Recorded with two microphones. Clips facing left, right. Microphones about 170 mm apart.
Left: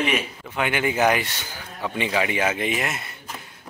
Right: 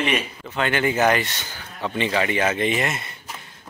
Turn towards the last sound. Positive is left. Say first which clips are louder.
# right 2 dB
turn(degrees=5)  # may be behind; listen again after turning